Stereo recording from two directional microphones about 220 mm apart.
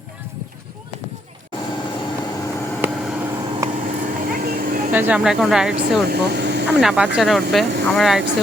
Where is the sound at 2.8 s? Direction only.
Centre (ahead or behind).